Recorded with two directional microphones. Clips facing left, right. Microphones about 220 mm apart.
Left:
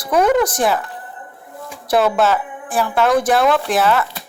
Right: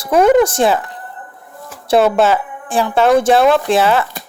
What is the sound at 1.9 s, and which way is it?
A woman's voice, 25° right (ahead or behind).